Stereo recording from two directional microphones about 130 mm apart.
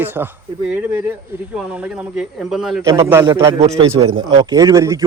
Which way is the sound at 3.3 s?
40° right (ahead or behind).